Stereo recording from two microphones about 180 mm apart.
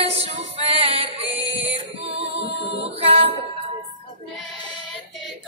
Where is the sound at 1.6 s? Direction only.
35° right (ahead or behind).